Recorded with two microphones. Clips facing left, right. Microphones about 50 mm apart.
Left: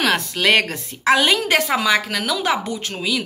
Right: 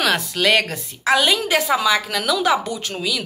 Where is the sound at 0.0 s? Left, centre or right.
Left.